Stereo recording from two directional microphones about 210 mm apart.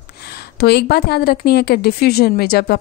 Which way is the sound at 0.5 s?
50° left (ahead or behind).